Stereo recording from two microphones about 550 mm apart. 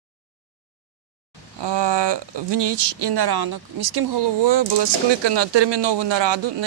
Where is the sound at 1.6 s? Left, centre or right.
Right.